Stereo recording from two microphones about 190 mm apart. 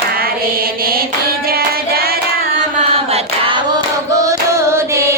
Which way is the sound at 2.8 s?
30° right (ahead or behind).